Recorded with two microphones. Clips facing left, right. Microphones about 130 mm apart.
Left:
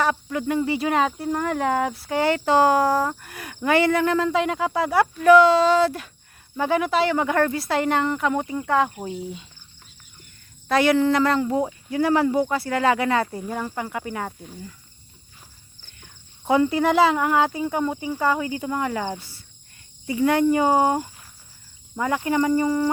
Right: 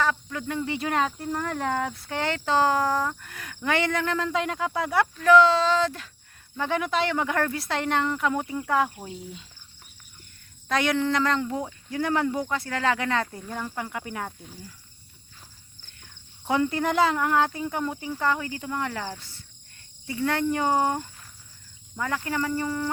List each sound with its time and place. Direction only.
0.0 s speech: 15° left (ahead or behind)
10.7 s speech: 5° left (ahead or behind)
15.8 s speech: 5° left (ahead or behind); by 22.9 s 20° left (ahead or behind)